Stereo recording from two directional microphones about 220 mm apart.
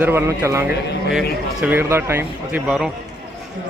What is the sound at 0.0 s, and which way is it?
Speech, 10° right (ahead or behind).